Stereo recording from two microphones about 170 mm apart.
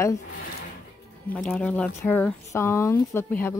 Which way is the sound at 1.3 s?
5° left (ahead or behind).